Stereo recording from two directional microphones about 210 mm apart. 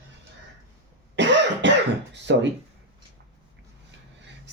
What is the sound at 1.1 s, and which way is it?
Cough, 60° right (ahead or behind).